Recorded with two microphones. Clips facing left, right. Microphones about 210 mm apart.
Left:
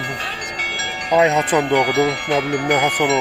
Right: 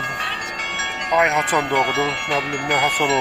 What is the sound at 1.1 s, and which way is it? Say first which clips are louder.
Speech: left 4 dB; 35° left (ahead or behind).